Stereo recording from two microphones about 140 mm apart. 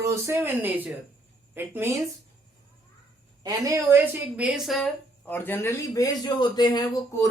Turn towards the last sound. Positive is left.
turn(degrees=25)  # may be behind; listen again after turning